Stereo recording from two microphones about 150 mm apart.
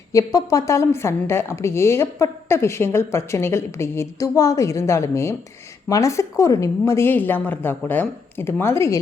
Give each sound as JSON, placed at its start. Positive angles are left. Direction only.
{"t": 0.1, "sound": "a woman's voice", "side_deg": 25}